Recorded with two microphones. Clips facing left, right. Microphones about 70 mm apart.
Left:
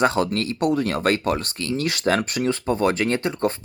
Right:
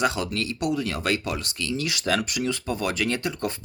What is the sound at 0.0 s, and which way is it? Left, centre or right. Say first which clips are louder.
Speech: left 5 dB; left.